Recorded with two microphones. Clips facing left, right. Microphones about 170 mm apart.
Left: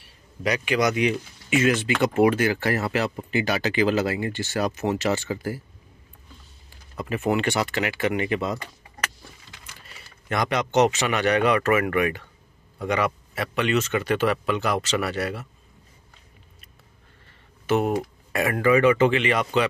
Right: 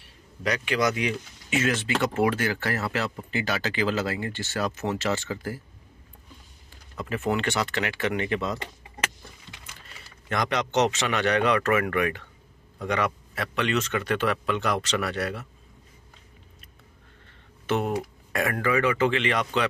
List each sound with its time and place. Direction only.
0.4 s speech: 15° left (ahead or behind)
7.0 s speech: 15° left (ahead or behind)
10.3 s speech: 10° left (ahead or behind)
17.6 s speech: 5° left (ahead or behind)